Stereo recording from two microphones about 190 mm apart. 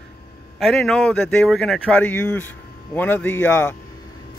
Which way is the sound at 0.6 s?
Centre (ahead or behind).